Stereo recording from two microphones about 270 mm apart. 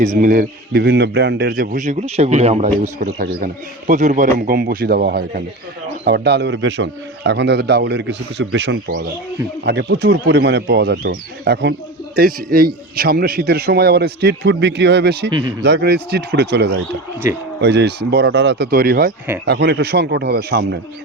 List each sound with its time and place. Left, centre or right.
0.0 s a man's voice: right
15.3 s speech: centre
15.6 s a man's voice: right